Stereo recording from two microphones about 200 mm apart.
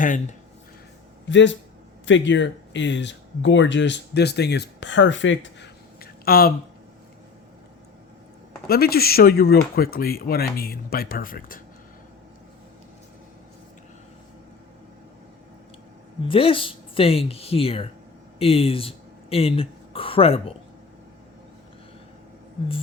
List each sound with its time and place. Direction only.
0.0 s speech: 40° left (ahead or behind)
1.3 s a man's voice: 65° left (ahead or behind); by 6.5 s 50° left (ahead or behind)
8.6 s speech: 50° left (ahead or behind)
16.2 s speech: 25° left (ahead or behind)